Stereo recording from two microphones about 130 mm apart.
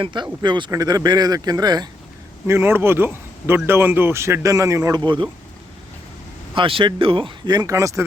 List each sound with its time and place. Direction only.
0.0 s speech: 35° right (ahead or behind)
2.5 s a man's voice: 20° right (ahead or behind); by 5.3 s 40° right (ahead or behind)
6.5 s speech: 40° right (ahead or behind); by 8.0 s 25° right (ahead or behind)